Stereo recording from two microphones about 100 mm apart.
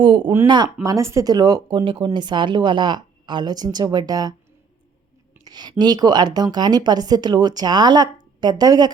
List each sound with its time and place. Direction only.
0.0 s a woman's voice: 55° right (ahead or behind); by 1.3 s 30° right (ahead or behind)
1.3 s a woman's voice: 45° right (ahead or behind)
1.8 s a woman's voice: 60° right (ahead or behind); by 4.4 s 40° right (ahead or behind)
5.5 s a woman's voice: 45° right (ahead or behind)